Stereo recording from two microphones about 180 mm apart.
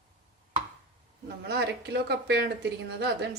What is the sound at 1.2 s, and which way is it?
Speech, 65° right (ahead or behind).